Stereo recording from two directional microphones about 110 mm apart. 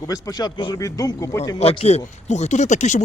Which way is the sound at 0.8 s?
30° left (ahead or behind).